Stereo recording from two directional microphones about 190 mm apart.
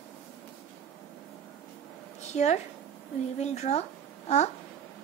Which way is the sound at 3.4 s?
35° left (ahead or behind).